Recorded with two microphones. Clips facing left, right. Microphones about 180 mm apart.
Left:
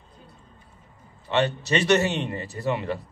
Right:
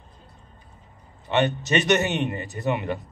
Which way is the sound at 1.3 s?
20° right (ahead or behind).